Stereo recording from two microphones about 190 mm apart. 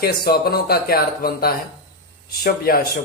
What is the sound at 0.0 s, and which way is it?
Speech, 55° left (ahead or behind).